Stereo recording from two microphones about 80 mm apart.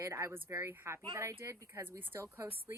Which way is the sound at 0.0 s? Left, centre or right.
Right.